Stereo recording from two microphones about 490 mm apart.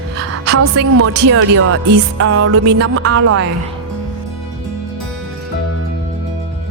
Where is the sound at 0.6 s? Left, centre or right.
Right.